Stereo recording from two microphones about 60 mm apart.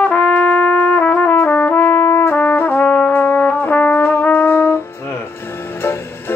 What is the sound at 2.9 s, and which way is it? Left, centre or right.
Brass instrument, left.